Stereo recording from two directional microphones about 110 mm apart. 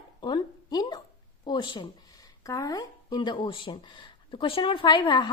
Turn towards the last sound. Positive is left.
turn(degrees=45)  # may be behind; listen again after turning